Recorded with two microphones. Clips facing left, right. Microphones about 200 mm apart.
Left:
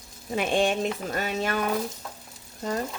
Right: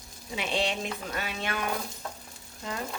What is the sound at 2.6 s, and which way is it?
Frying, 40° left (ahead or behind).